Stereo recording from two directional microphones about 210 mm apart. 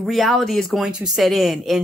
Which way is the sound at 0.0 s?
Centre (ahead or behind).